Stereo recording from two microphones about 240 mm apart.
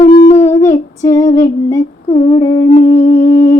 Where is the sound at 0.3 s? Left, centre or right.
Left.